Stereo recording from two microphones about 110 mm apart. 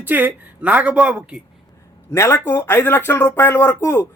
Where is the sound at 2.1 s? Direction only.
25° left (ahead or behind).